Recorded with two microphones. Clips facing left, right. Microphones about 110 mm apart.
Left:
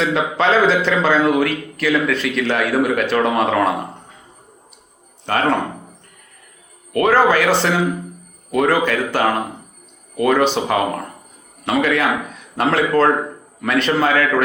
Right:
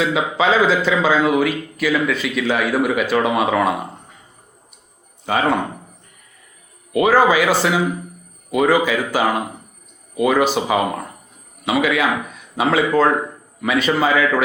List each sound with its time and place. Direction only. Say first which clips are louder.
0.0 s a man's voice: even; 5° right (ahead or behind)
5.2 s speech: even; 5° right (ahead or behind)
6.9 s a man's voice: even; 5° right (ahead or behind)